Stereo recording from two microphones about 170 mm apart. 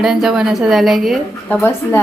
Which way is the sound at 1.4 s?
10° left (ahead or behind).